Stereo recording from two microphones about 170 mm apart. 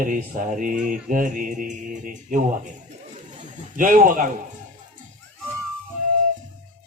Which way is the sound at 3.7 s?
50° right (ahead or behind).